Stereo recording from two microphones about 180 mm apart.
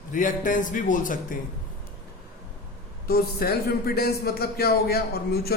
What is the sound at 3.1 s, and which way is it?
A man's voice, 60° left (ahead or behind).